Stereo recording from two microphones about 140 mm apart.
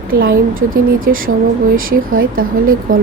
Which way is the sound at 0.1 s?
90° right.